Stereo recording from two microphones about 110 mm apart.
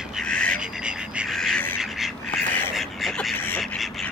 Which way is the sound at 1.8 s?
Centre (ahead or behind).